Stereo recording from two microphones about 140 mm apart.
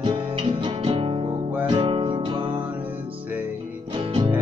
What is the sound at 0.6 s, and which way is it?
Music, 40° right (ahead or behind).